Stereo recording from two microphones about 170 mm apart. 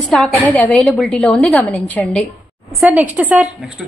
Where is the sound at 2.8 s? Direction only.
10° right (ahead or behind).